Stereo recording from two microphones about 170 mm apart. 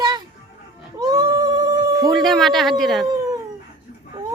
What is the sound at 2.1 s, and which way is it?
Speech, centre (ahead or behind).